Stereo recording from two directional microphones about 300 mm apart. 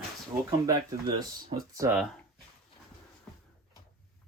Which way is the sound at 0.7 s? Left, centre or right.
Centre.